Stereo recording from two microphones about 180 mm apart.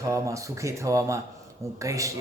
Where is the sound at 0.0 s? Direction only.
15° right (ahead or behind).